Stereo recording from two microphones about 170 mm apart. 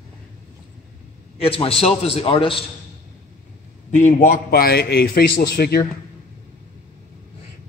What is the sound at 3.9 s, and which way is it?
A man's voice, 45° left (ahead or behind).